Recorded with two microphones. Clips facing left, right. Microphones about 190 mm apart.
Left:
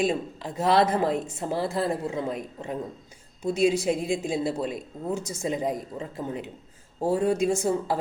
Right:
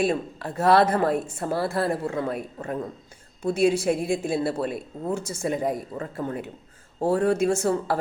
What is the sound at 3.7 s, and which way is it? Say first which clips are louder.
Speech: right 2 dB; 15° left (ahead or behind).